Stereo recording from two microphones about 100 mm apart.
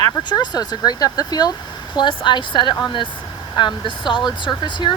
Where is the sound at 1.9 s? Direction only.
55° left (ahead or behind).